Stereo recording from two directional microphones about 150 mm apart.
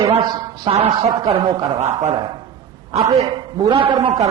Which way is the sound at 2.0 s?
50° right (ahead or behind).